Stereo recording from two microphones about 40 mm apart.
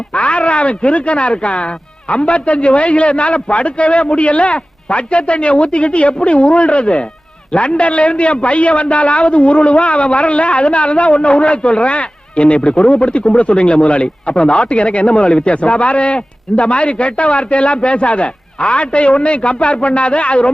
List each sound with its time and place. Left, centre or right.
0.1 s a man's voice: left